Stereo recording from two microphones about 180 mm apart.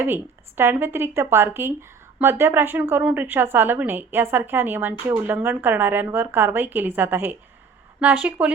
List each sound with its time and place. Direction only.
0.0 s a woman's voice: 10° right (ahead or behind)